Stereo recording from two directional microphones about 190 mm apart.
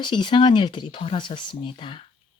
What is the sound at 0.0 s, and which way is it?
Speech, 25° left (ahead or behind).